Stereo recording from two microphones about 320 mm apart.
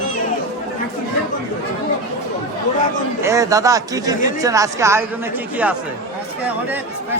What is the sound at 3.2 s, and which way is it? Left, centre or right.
Speech, centre.